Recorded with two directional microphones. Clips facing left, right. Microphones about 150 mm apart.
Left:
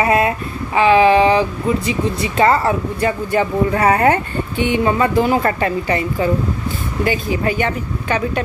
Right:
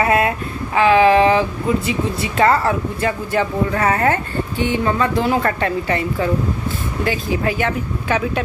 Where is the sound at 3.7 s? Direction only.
15° left (ahead or behind).